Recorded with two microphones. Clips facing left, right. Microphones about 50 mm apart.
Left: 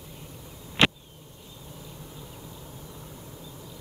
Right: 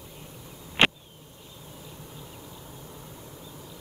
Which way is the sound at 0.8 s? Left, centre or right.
Right.